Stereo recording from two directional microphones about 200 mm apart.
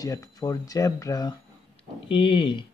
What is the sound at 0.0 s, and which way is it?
Speech, 15° left (ahead or behind).